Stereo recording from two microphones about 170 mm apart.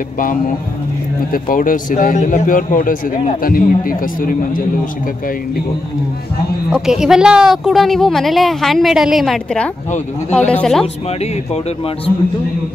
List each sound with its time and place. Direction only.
1.3 s a man's voice: 55° left (ahead or behind)
6.7 s a woman's voice: 5° right (ahead or behind)